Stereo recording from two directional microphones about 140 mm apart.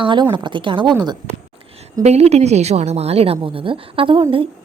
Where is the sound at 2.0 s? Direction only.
50° right (ahead or behind).